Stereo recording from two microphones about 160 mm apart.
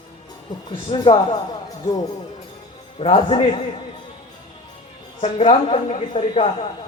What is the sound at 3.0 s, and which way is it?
Speech, 40° left (ahead or behind).